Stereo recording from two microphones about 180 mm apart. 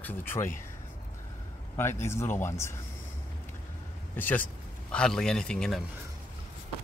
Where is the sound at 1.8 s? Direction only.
15° left (ahead or behind).